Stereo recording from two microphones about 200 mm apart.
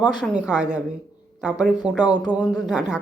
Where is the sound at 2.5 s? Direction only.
Centre (ahead or behind).